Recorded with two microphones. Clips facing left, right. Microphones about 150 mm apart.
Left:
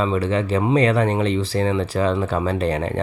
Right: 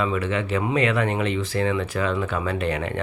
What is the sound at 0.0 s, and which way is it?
Speech, 30° left (ahead or behind).